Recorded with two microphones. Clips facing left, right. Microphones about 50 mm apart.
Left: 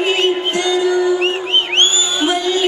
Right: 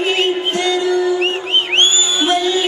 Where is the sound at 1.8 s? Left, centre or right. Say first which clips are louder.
Right 1 dB; centre.